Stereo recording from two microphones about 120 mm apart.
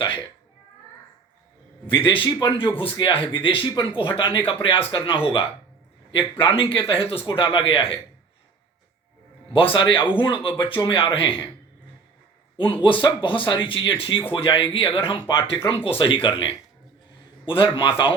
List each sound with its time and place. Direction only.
1.9 s speech: 45° left (ahead or behind)
6.8 s speech: 50° left (ahead or behind)
9.5 s speech: 50° left (ahead or behind)
12.7 s speech: 45° left (ahead or behind)